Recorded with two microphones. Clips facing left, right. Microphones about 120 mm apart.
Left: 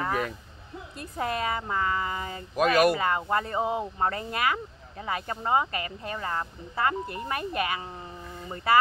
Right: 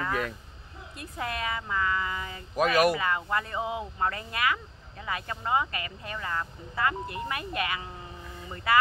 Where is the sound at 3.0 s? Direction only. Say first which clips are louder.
Left 3 dB; 35° left (ahead or behind).